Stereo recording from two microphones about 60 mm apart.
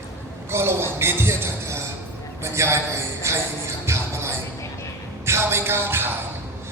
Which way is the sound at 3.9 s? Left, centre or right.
Right.